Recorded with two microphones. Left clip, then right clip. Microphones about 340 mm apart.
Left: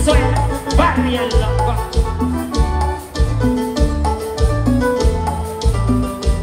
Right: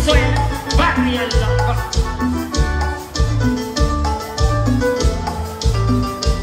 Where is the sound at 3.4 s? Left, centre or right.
Centre.